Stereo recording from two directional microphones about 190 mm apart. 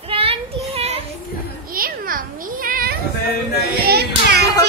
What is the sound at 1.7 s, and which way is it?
Cat, 50° right (ahead or behind).